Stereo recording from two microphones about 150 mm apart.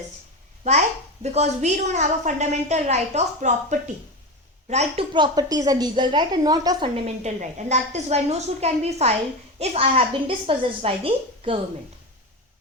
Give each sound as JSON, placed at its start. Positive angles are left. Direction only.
{"t": 0.7, "sound": "a woman's voice", "side_deg": -45}
{"t": 5.1, "sound": "a woman's voice", "side_deg": -30}
{"t": 6.8, "sound": "a woman's voice", "side_deg": -40}